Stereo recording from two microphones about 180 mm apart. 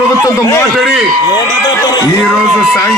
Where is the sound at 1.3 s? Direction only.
20° left (ahead or behind).